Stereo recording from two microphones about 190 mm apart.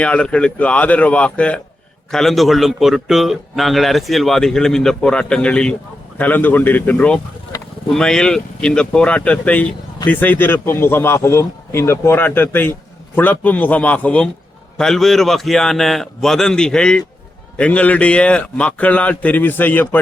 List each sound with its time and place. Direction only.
0.0 s a man's voice: 5° left (ahead or behind)